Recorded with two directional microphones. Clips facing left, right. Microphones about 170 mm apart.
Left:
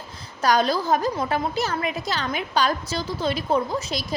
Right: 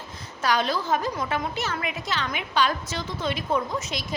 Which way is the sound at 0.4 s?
40° left (ahead or behind).